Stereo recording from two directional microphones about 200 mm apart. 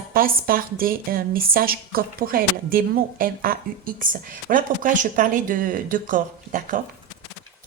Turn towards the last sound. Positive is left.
turn(degrees=-40)  # may be behind; listen again after turning